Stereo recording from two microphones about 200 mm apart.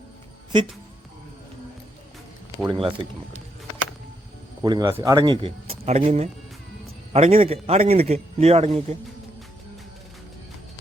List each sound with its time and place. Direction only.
2.6 s a man's voice: 25° right (ahead or behind)
4.6 s a man's voice: 20° right (ahead or behind)